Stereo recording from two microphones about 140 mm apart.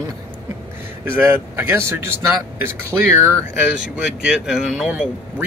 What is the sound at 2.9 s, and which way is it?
Speech, 5° right (ahead or behind).